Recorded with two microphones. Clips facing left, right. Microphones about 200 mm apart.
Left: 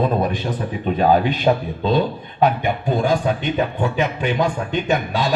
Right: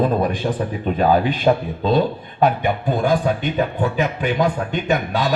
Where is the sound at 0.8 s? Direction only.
45° right (ahead or behind).